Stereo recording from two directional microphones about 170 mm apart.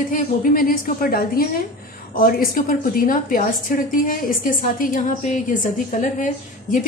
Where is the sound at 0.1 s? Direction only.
55° left (ahead or behind).